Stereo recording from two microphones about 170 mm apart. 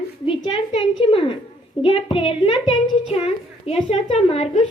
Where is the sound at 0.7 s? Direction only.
35° left (ahead or behind).